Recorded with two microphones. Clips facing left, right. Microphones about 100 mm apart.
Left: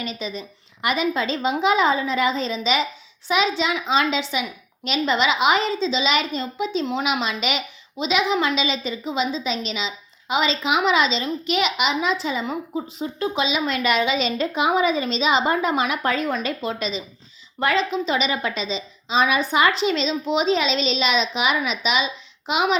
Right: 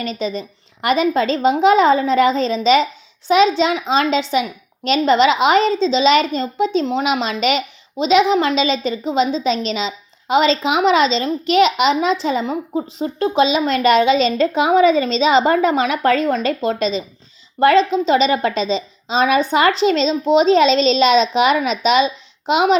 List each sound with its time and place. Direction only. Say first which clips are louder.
0.0 s a woman's voice: right 7 dB; 35° right (ahead or behind)
18.3 s a woman's voice: right 8 dB; 40° right (ahead or behind)
19.4 s a woman's voice: right 5 dB; 30° right (ahead or behind)